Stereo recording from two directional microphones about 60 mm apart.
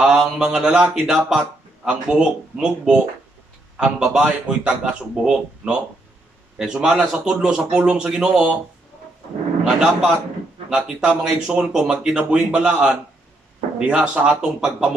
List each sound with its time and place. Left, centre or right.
0.0 s speech: centre
9.8 s speech: centre